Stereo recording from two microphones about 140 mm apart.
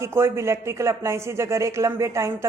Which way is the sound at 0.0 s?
20° right (ahead or behind).